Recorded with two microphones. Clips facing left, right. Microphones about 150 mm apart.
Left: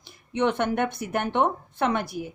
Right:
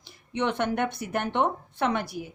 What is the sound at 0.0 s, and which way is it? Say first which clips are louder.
A woman's voice: left 4 dB; 50° left (ahead or behind).